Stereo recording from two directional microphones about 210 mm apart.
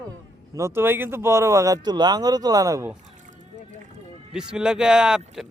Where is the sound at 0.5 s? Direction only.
10° right (ahead or behind).